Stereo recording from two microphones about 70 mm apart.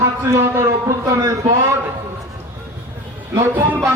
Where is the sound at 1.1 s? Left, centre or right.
Right.